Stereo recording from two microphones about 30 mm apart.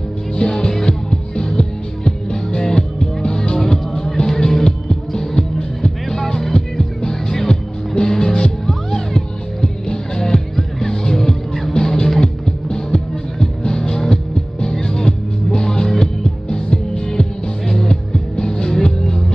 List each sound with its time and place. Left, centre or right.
0.4 s music: left